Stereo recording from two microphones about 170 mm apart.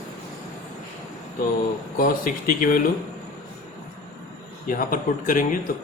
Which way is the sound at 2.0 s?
55° left (ahead or behind).